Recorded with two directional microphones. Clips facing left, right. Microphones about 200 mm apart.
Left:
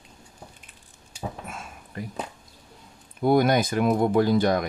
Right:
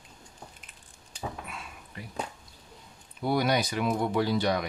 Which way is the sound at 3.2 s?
50° left (ahead or behind).